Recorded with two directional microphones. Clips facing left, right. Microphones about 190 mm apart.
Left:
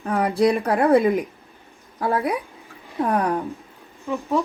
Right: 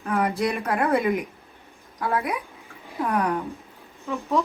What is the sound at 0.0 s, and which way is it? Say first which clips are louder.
Speech: left 5 dB; 35° left (ahead or behind).